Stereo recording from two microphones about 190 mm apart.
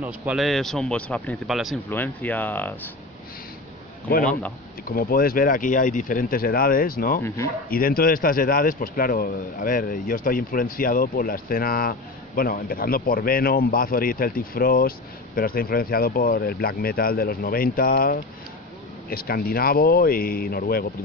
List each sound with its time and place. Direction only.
0.0 s a man's voice: 5° right (ahead or behind)
1.9 s speech: 10° left (ahead or behind)
4.8 s speech: 50° left (ahead or behind)